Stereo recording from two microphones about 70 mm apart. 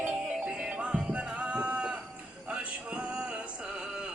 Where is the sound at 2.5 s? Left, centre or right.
Centre.